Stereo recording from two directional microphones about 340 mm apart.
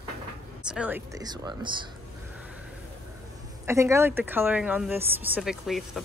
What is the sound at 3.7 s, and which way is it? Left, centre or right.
A woman's voice, centre.